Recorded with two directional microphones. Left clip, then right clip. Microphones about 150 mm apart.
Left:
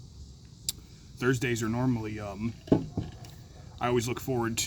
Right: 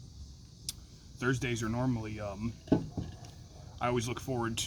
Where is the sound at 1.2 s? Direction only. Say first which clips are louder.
Left 5 dB; 35° left (ahead or behind).